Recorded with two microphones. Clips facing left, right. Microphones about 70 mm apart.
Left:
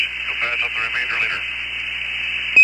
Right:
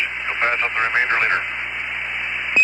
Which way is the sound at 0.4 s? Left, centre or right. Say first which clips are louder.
Right 5 dB; right.